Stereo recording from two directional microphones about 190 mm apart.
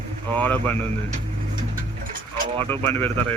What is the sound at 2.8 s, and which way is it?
Speech, 10° left (ahead or behind).